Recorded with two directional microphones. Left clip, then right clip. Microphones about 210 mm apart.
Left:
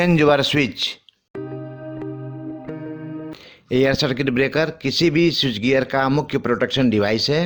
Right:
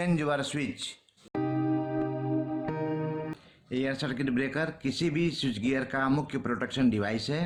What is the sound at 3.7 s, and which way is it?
Speech, 45° left (ahead or behind).